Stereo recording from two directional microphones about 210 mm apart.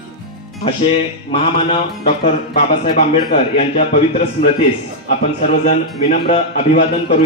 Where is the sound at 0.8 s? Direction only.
25° left (ahead or behind).